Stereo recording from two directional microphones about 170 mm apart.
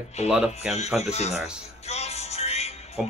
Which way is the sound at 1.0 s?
40° left (ahead or behind).